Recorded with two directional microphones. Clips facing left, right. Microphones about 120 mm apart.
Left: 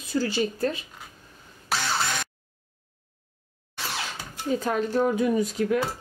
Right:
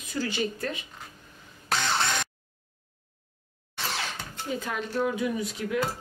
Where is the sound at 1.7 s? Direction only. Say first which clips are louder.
Even; 5° left (ahead or behind).